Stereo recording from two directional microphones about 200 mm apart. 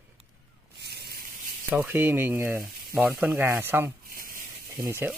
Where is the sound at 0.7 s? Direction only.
55° right (ahead or behind).